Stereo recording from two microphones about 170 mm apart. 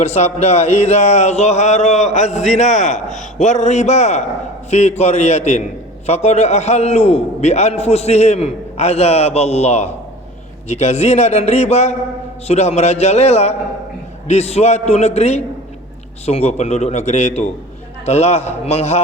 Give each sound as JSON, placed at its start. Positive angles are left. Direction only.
{"t": 0.0, "sound": "a man's voice", "side_deg": 40}